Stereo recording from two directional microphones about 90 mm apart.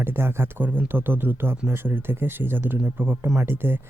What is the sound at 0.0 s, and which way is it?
Speech, 25° right (ahead or behind).